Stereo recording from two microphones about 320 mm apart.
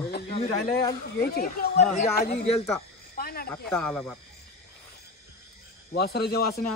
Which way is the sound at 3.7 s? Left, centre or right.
Centre.